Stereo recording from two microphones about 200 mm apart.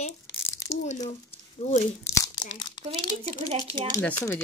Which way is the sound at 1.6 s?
30° left (ahead or behind).